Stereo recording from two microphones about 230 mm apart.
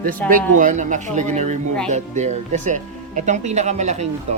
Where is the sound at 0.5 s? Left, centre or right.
Right.